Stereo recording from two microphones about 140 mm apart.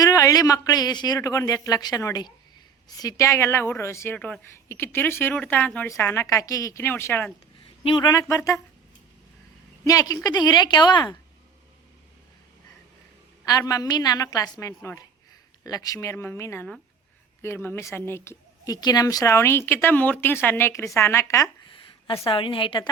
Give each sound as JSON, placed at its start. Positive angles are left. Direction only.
{"t": 0.0, "sound": "a woman's voice", "side_deg": 25}
{"t": 7.9, "sound": "a woman's voice", "side_deg": 35}
{"t": 8.1, "sound": "speech", "side_deg": 20}
{"t": 9.8, "sound": "a woman's voice", "side_deg": 25}
{"t": 13.4, "sound": "a woman's voice", "side_deg": 25}
{"t": 22.3, "sound": "a woman's voice", "side_deg": 40}